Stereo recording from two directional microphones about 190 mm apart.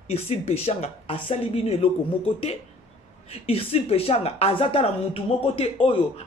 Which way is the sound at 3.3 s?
30° left (ahead or behind).